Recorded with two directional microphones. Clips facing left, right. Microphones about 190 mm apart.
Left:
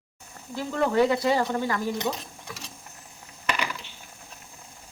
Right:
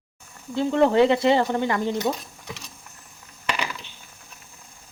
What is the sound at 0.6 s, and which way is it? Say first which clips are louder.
A woman's voice: right 5 dB; 25° right (ahead or behind).